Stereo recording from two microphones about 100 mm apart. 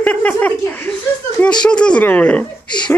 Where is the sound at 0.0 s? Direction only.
15° left (ahead or behind).